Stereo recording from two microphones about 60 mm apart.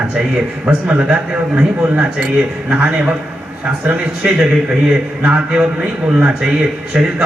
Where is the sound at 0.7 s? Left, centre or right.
Right.